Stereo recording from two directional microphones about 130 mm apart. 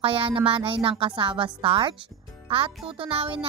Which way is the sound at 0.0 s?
45° right (ahead or behind).